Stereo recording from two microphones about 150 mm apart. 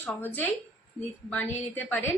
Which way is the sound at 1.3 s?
10° left (ahead or behind).